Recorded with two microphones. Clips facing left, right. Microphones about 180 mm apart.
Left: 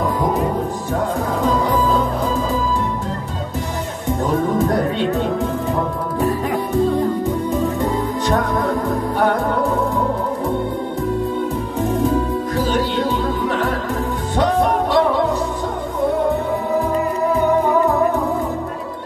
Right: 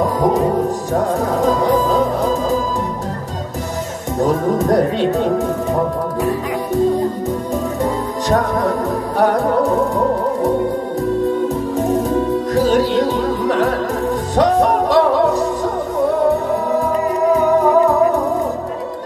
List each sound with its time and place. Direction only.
1.4 s music: 40° right (ahead or behind)
4.6 s music: 40° right (ahead or behind)
12.6 s music: 40° right (ahead or behind)